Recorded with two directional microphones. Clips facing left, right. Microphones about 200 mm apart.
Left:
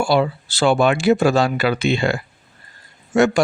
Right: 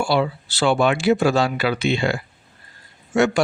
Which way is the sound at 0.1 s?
45° left (ahead or behind).